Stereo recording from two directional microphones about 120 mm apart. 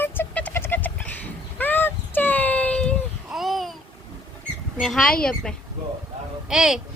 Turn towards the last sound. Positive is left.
turn(degrees=-5)  # may be behind; listen again after turning